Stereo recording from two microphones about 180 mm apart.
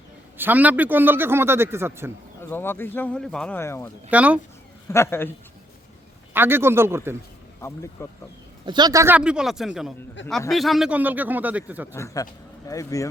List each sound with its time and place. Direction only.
0.3 s a man's voice: 10° right (ahead or behind)
2.4 s speech: 10° left (ahead or behind)
4.1 s a man's voice: 5° right (ahead or behind)
4.9 s speech: 15° left (ahead or behind)
6.3 s a man's voice: 10° right (ahead or behind)
8.0 s speech: 15° left (ahead or behind)
8.6 s speech: 25° right (ahead or behind); by 9.9 s centre (ahead or behind)
10.2 s a man's voice: 90° left
10.5 s a man's voice: centre (ahead or behind)
11.9 s speech: 20° left (ahead or behind)